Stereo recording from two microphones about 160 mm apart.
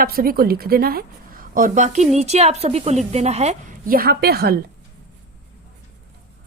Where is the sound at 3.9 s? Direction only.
70° right (ahead or behind); by 4.6 s 85° right.